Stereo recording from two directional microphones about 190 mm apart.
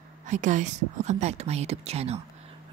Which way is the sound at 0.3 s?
40° right (ahead or behind).